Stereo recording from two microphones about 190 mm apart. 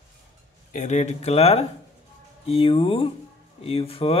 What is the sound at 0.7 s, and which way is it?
Speech, 40° left (ahead or behind).